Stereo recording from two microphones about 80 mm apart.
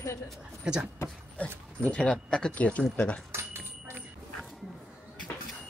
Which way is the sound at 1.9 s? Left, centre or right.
Centre.